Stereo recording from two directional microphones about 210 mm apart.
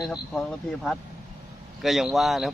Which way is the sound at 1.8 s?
Centre (ahead or behind).